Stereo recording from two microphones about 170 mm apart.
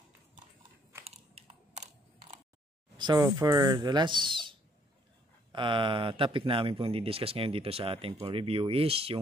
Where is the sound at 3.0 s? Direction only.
25° right (ahead or behind).